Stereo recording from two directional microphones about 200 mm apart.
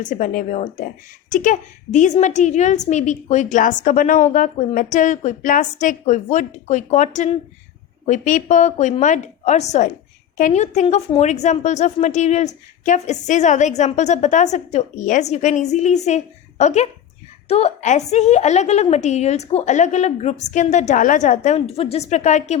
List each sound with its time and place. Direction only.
0.0 s a woman's voice: 40° left (ahead or behind)